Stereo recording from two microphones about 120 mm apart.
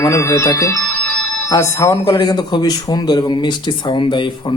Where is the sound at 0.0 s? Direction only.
25° left (ahead or behind).